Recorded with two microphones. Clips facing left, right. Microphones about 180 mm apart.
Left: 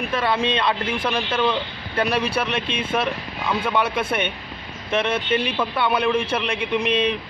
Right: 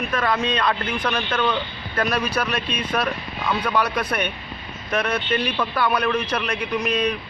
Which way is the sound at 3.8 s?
25° left (ahead or behind).